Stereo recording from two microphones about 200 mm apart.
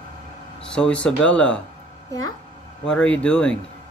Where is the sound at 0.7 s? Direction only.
5° left (ahead or behind).